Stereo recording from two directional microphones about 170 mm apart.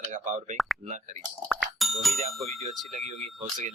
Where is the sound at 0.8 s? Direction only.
45° right (ahead or behind).